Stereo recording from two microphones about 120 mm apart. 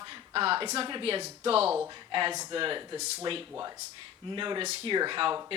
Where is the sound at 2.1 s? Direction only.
45° right (ahead or behind).